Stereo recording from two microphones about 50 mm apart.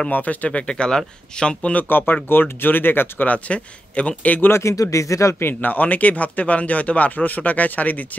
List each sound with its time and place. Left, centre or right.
0.1 s speech: left; by 1.7 s centre
1.7 s speech: left
3.3 s speech: left
4.5 s speech: left
5.4 s speech: left